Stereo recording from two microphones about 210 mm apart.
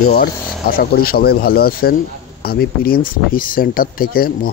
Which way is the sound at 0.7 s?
45° left (ahead or behind).